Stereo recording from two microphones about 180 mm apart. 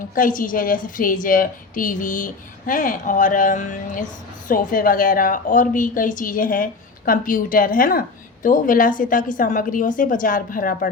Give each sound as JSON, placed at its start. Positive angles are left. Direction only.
{"t": 0.1, "sound": "a woman's voice", "side_deg": 50}